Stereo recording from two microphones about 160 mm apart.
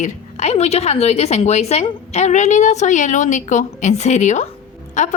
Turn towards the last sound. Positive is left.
turn(degrees=45)  # may be behind; listen again after turning